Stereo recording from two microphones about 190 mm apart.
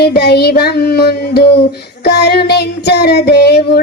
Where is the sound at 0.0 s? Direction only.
60° left (ahead or behind).